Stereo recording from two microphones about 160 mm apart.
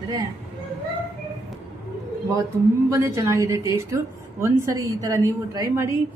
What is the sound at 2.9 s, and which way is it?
A woman's voice, 20° right (ahead or behind).